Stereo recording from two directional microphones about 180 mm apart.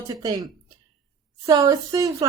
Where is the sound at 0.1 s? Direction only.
20° right (ahead or behind).